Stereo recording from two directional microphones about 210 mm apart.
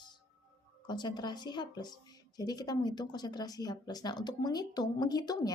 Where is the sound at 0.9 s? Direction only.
20° left (ahead or behind).